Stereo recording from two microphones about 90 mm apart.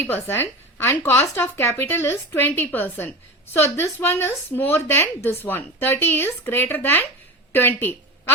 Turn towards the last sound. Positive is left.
turn(degrees=25)  # may be behind; listen again after turning